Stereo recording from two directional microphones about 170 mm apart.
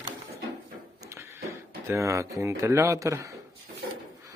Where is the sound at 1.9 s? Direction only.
15° right (ahead or behind).